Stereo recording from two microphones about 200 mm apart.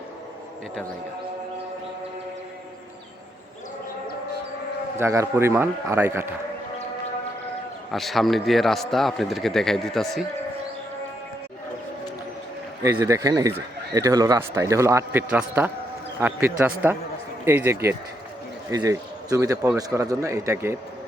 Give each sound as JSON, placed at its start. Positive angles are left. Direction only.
{"t": 4.9, "sound": "speech", "side_deg": -15}
{"t": 7.9, "sound": "a man's voice", "side_deg": 0}
{"t": 12.8, "sound": "speech", "side_deg": -15}